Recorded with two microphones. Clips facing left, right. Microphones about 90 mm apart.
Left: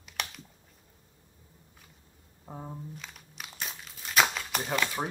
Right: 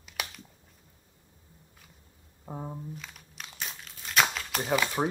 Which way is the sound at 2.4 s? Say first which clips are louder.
Right 3 dB; 10° right (ahead or behind).